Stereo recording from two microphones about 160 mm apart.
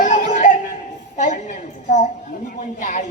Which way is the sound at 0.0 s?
50° left (ahead or behind).